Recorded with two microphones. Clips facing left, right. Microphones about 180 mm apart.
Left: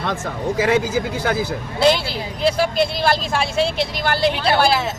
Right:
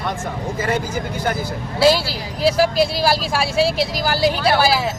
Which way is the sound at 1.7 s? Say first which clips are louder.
Right 1 dB; 5° right (ahead or behind).